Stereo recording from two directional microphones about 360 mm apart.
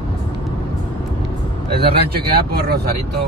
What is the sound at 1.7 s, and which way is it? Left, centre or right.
A man's voice, right.